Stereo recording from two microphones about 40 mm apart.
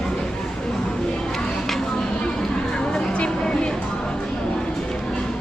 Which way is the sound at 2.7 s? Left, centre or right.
Centre.